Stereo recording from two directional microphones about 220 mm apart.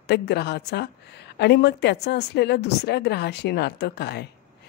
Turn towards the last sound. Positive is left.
turn(degrees=50)  # may be behind; listen again after turning